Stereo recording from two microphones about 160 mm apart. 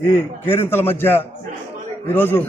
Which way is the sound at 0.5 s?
15° left (ahead or behind).